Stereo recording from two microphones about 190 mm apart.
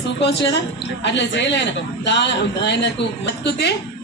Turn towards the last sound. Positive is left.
turn(degrees=60)  # may be behind; listen again after turning